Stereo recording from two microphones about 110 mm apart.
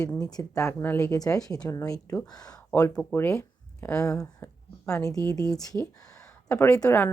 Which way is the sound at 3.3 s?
25° left (ahead or behind).